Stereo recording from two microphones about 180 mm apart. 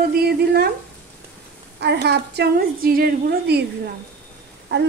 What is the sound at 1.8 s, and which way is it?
A woman's voice, 70° right (ahead or behind).